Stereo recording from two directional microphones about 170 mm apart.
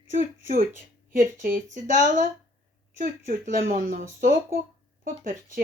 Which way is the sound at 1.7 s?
45° right (ahead or behind).